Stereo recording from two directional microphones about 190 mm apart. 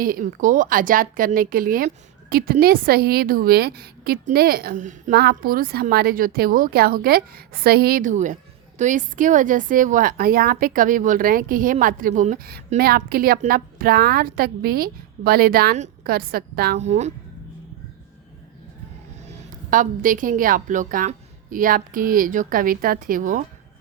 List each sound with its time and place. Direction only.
0.0 s a woman's voice: 45° right (ahead or behind)
5.1 s a woman's voice: 55° right (ahead or behind)
16.8 s a woman's voice: 35° right (ahead or behind)
19.7 s a woman's voice: 45° right (ahead or behind)